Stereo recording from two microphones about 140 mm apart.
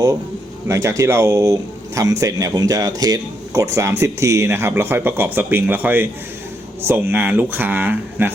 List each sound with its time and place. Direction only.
0.7 s a man's voice: 20° right (ahead or behind)